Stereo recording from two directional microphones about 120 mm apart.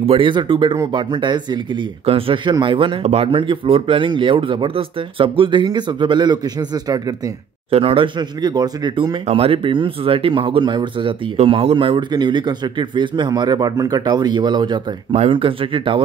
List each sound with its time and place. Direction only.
0.0 s a man's voice: 50° right (ahead or behind)
3.0 s speech: 65° right (ahead or behind)
3.3 s speech: 45° right (ahead or behind)
7.7 s a man's voice: 50° right (ahead or behind)
11.3 s a man's voice: 55° right (ahead or behind); by 14.8 s 40° right (ahead or behind)
15.1 s speech: 50° right (ahead or behind)